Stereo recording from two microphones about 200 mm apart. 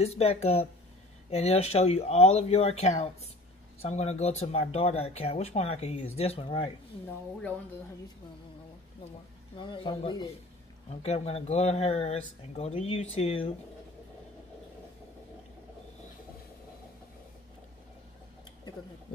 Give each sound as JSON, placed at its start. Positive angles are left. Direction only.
{"t": 0.0, "sound": "speech", "side_deg": 30}
{"t": 9.6, "sound": "speech", "side_deg": 25}